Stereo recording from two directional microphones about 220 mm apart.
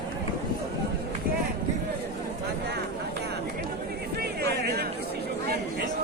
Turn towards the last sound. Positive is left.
turn(degrees=-45)  # may be behind; listen again after turning